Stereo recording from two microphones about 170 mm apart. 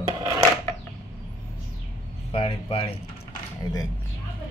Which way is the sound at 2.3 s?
30° left (ahead or behind).